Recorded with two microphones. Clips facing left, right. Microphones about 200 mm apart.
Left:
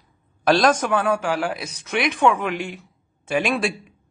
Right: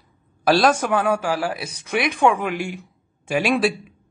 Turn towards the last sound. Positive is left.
turn(degrees=-5)  # may be behind; listen again after turning